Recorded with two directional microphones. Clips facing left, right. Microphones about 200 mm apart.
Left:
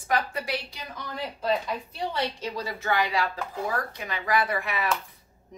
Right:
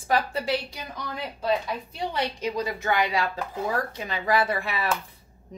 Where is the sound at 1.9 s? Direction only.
15° right (ahead or behind).